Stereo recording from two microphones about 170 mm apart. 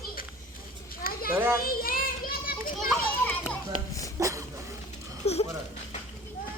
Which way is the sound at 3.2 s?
10° left (ahead or behind).